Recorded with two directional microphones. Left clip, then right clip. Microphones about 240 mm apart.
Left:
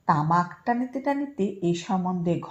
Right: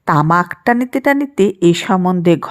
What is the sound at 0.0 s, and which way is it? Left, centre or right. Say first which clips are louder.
Speech: right 9 dB; right.